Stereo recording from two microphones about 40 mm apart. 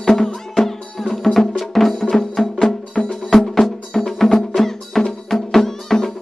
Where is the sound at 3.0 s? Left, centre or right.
Left.